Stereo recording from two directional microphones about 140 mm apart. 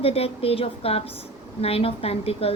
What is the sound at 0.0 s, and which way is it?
Speech, 45° left (ahead or behind).